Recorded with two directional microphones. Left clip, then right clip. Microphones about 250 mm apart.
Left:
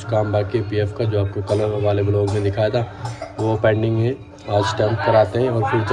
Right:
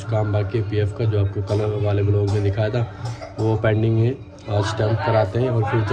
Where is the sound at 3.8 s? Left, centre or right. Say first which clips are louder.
Left 1 dB; centre.